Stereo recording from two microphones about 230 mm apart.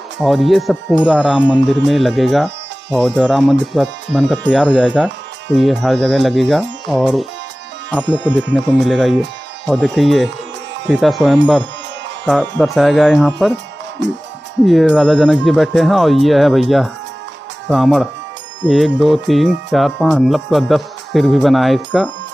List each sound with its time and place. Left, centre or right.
0.2 s speech: centre
1.6 s speech: right
1.9 s speech: centre
14.0 s speech: right
14.7 s speech: centre